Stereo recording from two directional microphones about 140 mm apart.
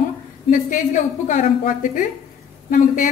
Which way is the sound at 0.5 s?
70° left (ahead or behind).